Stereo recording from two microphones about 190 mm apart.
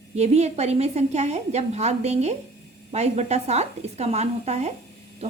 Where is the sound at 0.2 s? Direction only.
35° right (ahead or behind).